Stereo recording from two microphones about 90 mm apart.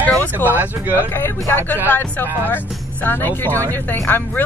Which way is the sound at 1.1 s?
25° left (ahead or behind).